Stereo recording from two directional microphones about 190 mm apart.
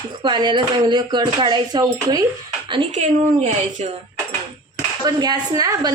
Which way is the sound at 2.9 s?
40° right (ahead or behind).